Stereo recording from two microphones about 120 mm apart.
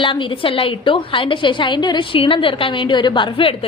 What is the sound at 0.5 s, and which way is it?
A woman's voice, 45° left (ahead or behind).